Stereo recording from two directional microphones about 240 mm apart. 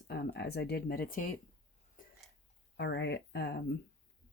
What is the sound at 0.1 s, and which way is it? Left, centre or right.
Speech, left.